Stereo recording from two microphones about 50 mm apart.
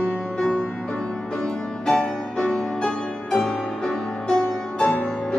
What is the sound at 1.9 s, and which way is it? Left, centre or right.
Music, centre.